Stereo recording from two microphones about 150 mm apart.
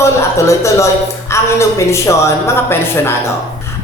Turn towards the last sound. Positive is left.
turn(degrees=15)  # may be behind; listen again after turning